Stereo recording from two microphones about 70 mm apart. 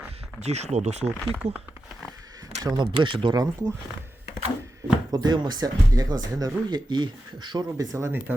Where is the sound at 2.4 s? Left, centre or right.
Right.